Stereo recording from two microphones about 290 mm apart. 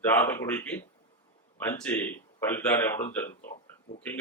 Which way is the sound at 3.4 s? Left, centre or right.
Left.